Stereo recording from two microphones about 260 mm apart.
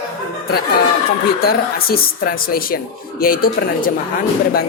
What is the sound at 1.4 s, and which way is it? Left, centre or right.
Speech, left.